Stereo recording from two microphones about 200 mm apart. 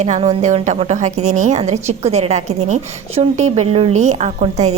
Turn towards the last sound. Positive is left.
turn(degrees=-35)  # may be behind; listen again after turning